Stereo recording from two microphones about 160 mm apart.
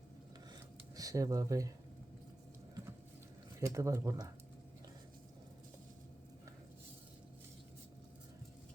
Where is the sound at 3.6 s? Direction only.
20° right (ahead or behind).